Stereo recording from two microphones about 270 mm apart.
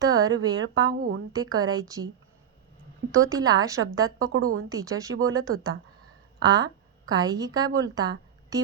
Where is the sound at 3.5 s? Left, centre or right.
Centre.